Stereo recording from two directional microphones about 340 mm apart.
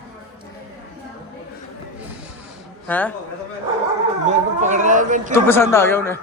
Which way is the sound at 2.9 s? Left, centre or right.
Centre.